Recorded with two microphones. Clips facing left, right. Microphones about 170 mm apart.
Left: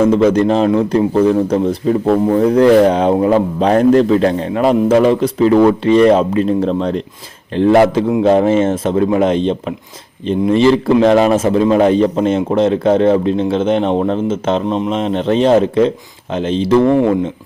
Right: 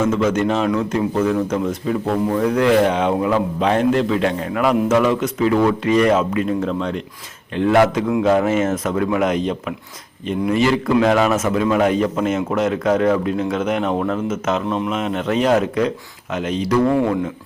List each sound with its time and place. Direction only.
0.0 s a man's voice: 35° left (ahead or behind)